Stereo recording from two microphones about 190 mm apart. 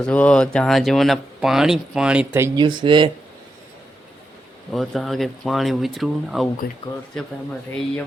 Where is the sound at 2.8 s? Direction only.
25° right (ahead or behind).